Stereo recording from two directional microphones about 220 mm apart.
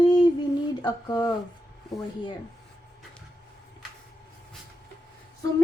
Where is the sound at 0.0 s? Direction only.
20° left (ahead or behind).